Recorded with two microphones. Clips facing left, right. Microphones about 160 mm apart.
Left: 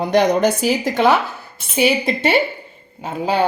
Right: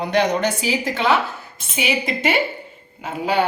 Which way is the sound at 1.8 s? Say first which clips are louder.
Left 6 dB; 30° left (ahead or behind).